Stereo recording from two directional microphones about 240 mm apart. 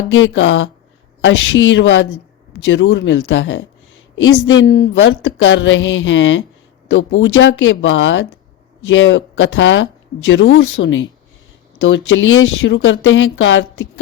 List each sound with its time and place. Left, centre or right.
0.1 s a woman's voice: left